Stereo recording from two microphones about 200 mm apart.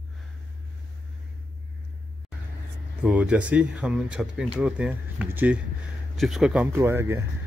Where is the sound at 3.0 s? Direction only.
5° right (ahead or behind).